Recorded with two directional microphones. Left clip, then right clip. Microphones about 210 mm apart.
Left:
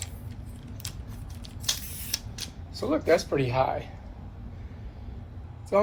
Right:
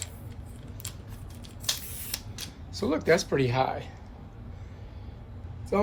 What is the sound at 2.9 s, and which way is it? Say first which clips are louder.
Speech: left 1 dB; 55° right (ahead or behind).